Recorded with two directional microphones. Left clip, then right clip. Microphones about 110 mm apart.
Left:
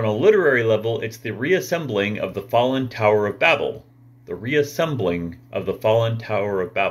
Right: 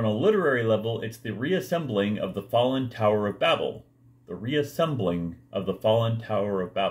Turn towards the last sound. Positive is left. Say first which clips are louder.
# left 5 dB
turn(degrees=-25)  # may be behind; listen again after turning